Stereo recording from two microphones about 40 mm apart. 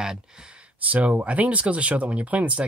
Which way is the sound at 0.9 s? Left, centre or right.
Right.